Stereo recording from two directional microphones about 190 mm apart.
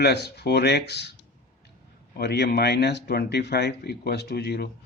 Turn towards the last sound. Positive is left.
turn(degrees=60)  # may be behind; listen again after turning